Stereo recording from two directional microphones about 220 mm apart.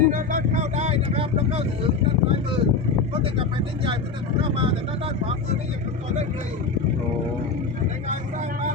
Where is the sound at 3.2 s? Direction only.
25° right (ahead or behind).